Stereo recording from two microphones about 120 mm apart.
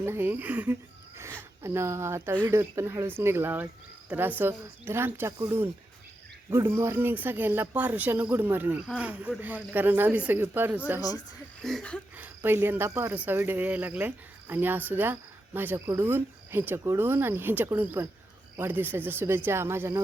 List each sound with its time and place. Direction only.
0.0 s speech: 20° right (ahead or behind)
6.7 s speech: 20° right (ahead or behind)
11.6 s a sound: 5° left (ahead or behind)
12.1 s speech: 15° right (ahead or behind)